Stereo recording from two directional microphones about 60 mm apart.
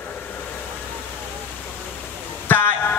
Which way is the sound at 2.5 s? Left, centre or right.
Left.